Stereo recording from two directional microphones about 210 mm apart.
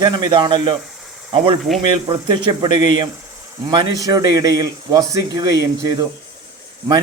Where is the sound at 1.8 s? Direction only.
20° right (ahead or behind).